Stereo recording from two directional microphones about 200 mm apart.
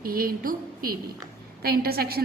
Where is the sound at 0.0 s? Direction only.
45° right (ahead or behind).